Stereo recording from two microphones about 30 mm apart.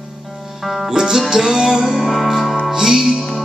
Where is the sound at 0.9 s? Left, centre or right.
Right.